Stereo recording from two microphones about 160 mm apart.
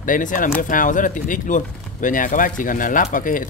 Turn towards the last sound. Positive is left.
turn(degrees=55)  # may be behind; listen again after turning